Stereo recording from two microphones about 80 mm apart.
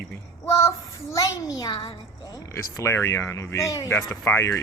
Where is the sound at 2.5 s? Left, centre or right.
Left.